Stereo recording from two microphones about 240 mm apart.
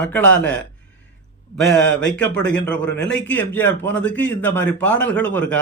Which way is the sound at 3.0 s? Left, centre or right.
Left.